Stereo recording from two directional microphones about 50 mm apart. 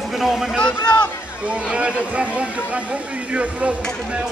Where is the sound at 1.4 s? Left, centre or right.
Right.